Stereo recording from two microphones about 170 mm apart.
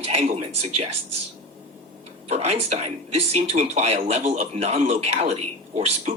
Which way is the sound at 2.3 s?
40° right (ahead or behind).